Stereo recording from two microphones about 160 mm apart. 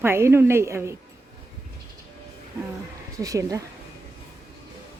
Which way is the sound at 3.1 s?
20° right (ahead or behind).